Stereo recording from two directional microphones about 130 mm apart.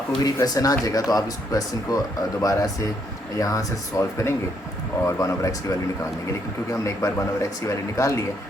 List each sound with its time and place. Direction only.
0.2 s speech: 30° left (ahead or behind)
6.8 s speech: 25° left (ahead or behind)